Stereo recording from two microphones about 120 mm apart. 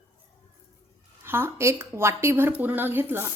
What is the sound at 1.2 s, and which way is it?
Speech, 20° right (ahead or behind).